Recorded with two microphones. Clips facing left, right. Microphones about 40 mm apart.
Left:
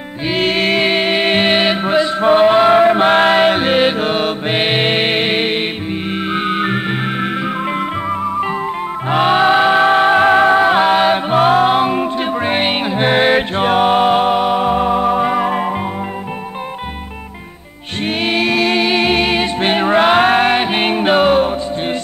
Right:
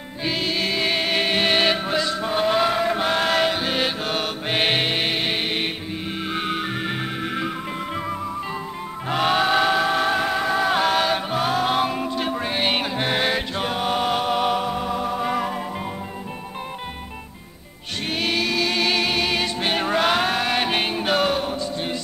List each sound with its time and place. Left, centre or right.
0.3 s music: left
2.2 s chant: left
4.8 s music: left
9.1 s music: left
18.2 s music: left